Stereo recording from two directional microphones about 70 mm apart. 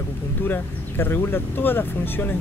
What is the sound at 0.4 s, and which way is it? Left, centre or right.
Speech, left.